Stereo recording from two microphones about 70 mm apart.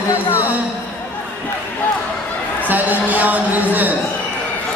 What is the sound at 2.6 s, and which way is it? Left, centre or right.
Speech, right.